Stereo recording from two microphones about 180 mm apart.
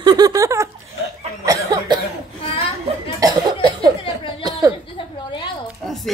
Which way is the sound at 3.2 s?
20° right (ahead or behind).